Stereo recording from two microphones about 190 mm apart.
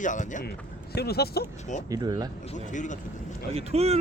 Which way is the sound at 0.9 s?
55° left (ahead or behind).